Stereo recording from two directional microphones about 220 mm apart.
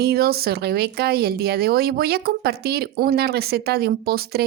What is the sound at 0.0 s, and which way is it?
A woman's voice, 45° right (ahead or behind).